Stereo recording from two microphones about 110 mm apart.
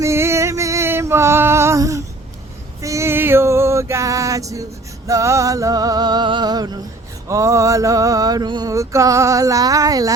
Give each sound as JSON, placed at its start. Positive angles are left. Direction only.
{"t": 0.0, "sound": "music", "side_deg": -25}
{"t": 7.3, "sound": "music", "side_deg": -30}
{"t": 8.7, "sound": "music", "side_deg": -30}